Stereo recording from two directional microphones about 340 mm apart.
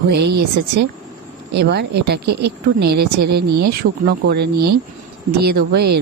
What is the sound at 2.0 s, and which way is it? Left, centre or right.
Speech, right.